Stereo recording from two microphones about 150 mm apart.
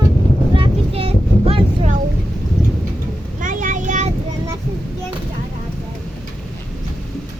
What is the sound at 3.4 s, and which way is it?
Child singing, 60° right (ahead or behind).